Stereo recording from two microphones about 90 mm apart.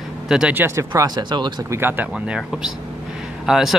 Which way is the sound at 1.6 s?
25° right (ahead or behind).